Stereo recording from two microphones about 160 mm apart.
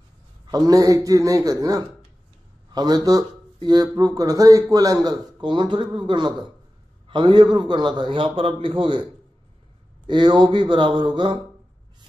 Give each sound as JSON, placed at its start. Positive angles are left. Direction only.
{"t": 0.5, "sound": "speech", "side_deg": -20}
{"t": 10.0, "sound": "speech", "side_deg": -30}